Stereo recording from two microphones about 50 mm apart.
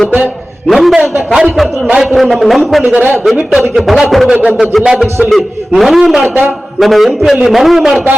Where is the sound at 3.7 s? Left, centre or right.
Centre.